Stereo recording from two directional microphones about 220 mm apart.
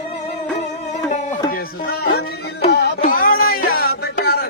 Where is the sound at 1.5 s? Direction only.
45° left (ahead or behind).